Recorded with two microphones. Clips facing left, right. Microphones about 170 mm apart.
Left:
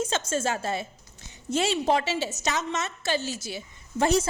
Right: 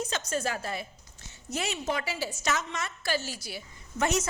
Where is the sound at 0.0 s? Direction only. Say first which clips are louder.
Left 4 dB; 25° left (ahead or behind).